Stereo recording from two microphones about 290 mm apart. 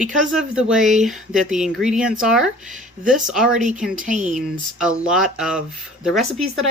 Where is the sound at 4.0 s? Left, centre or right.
Right.